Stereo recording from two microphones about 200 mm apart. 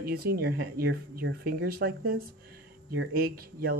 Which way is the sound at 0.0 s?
50° right (ahead or behind).